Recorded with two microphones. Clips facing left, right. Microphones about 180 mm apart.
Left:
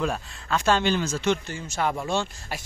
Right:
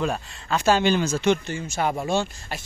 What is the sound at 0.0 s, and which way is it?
Speech, centre (ahead or behind).